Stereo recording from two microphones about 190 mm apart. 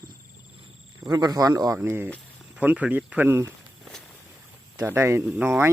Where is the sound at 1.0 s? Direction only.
20° right (ahead or behind).